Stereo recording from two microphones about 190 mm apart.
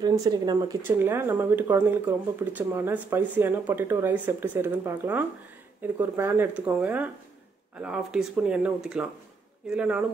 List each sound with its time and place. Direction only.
0.0 s speech: 20° right (ahead or behind)